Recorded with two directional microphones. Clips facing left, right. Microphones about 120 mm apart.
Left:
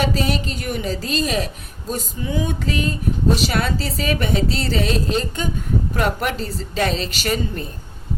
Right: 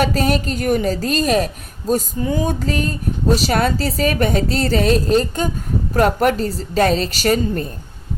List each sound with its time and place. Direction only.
0.0 s a woman's voice: 45° right (ahead or behind)
1.9 s music: 40° right (ahead or behind)
3.3 s a woman's voice: 40° right (ahead or behind)